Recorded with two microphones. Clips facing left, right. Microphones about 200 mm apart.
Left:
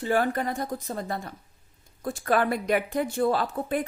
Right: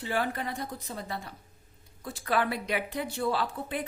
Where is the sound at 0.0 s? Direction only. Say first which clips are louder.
Left 6 dB; 45° left (ahead or behind).